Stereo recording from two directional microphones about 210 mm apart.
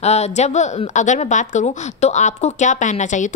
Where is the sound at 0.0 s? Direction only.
30° left (ahead or behind).